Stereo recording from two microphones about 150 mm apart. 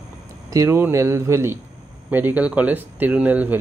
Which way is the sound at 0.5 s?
20° right (ahead or behind).